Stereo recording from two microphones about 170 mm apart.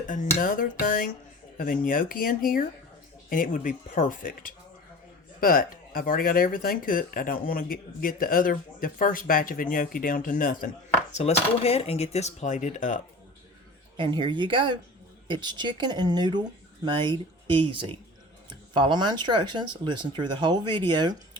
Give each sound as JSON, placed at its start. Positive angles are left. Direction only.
{"t": 0.3, "sound": "speech", "side_deg": 55}
{"t": 11.1, "sound": "speech", "side_deg": 40}
{"t": 13.9, "sound": "speech", "side_deg": -30}